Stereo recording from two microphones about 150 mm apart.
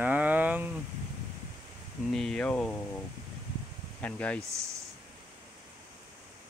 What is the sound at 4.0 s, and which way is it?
Speech, 10° left (ahead or behind).